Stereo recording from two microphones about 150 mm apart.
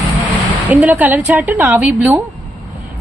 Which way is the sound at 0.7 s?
10° right (ahead or behind).